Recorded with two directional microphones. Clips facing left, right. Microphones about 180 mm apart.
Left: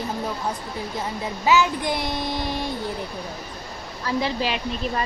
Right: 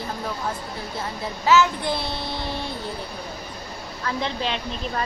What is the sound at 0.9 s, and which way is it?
A child's voice, 15° left (ahead or behind).